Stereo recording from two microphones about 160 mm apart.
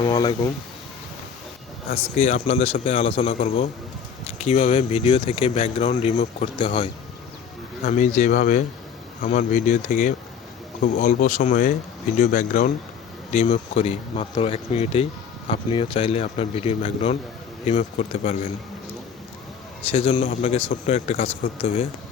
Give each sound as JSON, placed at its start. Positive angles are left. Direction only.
{"t": 0.0, "sound": "speech", "side_deg": 25}
{"t": 1.9, "sound": "speech", "side_deg": 50}
{"t": 7.9, "sound": "speech", "side_deg": 50}
{"t": 13.3, "sound": "speech", "side_deg": 45}
{"t": 19.9, "sound": "speech", "side_deg": 40}